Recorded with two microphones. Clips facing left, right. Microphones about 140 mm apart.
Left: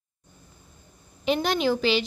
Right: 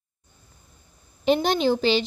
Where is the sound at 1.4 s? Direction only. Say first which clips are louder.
Right 2 dB; 25° right (ahead or behind).